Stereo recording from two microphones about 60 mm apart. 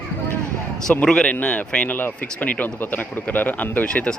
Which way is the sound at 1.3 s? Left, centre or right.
Left.